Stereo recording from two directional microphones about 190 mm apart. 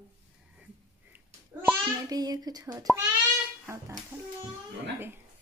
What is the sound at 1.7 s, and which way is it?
A child's voice, 20° right (ahead or behind).